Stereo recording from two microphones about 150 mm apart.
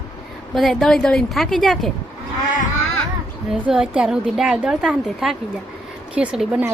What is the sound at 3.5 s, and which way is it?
A woman's voice, 5° right (ahead or behind).